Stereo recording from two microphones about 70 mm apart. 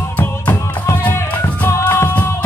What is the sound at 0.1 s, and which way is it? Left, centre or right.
Music, left.